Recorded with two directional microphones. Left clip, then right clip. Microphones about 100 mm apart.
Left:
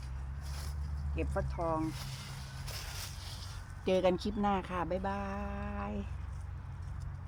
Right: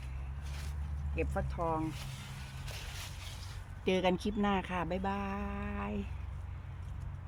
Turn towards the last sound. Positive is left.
turn(degrees=-45)  # may be behind; listen again after turning